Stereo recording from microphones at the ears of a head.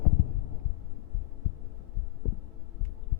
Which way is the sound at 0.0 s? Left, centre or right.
Left.